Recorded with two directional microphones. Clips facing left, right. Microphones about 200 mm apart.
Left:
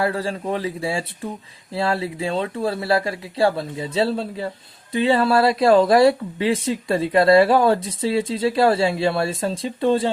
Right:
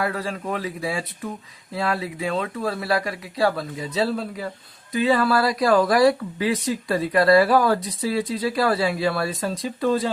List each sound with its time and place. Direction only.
0.0 s speech: 30° left (ahead or behind)